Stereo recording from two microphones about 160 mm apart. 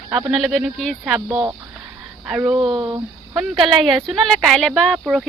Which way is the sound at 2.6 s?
30° right (ahead or behind).